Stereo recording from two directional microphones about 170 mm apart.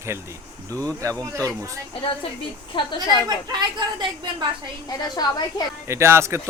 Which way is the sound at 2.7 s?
30° left (ahead or behind).